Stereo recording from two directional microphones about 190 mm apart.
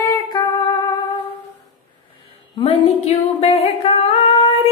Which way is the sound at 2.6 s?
35° left (ahead or behind).